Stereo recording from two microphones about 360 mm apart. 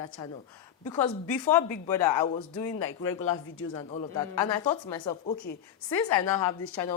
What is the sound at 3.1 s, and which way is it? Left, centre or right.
Speech, left.